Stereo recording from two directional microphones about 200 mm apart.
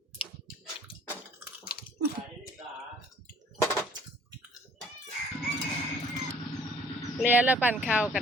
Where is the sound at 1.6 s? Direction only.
50° left (ahead or behind).